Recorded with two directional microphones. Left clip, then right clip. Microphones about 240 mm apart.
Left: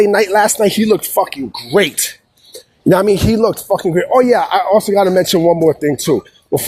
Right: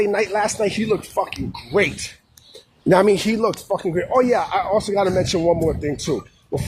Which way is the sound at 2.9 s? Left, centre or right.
Left.